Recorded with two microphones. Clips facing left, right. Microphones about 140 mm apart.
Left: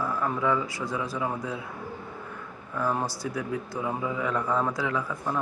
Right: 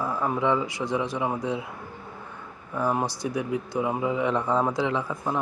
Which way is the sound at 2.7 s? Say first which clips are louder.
Right 2 dB; 20° right (ahead or behind).